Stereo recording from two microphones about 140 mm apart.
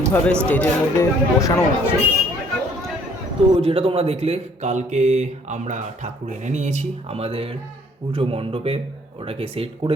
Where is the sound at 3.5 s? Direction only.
45° right (ahead or behind).